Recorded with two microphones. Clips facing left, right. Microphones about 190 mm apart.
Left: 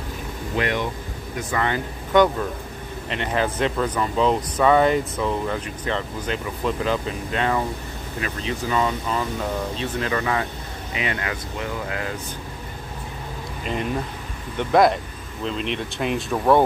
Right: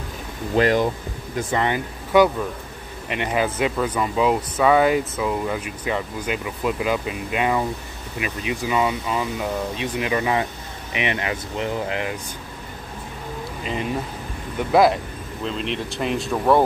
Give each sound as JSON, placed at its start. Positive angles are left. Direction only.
{"t": 0.6, "sound": "speech", "side_deg": -35}
{"t": 1.5, "sound": "speech", "side_deg": -20}
{"t": 2.1, "sound": "speech", "side_deg": -10}
{"t": 14.6, "sound": "speech", "side_deg": -5}